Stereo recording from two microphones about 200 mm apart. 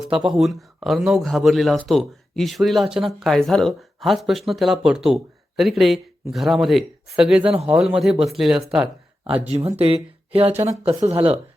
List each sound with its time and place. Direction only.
0.3 s speech: centre (ahead or behind)
7.4 s speech: 30° right (ahead or behind)
7.7 s speech: 5° right (ahead or behind)
9.2 s speech: 30° right (ahead or behind)